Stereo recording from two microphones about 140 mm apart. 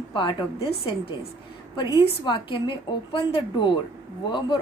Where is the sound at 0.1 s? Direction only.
35° left (ahead or behind).